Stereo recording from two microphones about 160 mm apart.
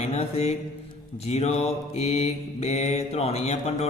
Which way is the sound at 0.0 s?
40° left (ahead or behind).